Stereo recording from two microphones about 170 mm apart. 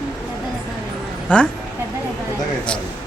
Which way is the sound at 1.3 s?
5° left (ahead or behind).